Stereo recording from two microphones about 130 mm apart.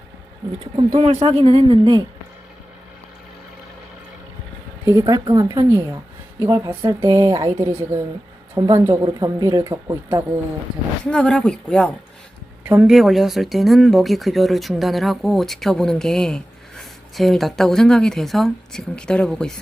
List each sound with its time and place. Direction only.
0.9 s speech: 50° right (ahead or behind)
4.9 s speech: 25° right (ahead or behind)
11.0 s speech: 10° left (ahead or behind)
12.6 s speech: 15° right (ahead or behind)
12.9 s speech: centre (ahead or behind)